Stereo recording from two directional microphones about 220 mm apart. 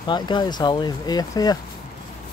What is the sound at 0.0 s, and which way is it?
Speech, 20° left (ahead or behind).